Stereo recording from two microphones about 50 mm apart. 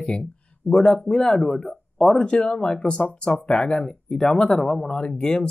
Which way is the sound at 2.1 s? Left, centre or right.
Centre.